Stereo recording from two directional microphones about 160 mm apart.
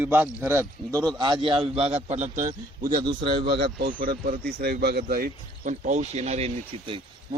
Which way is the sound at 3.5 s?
90° right.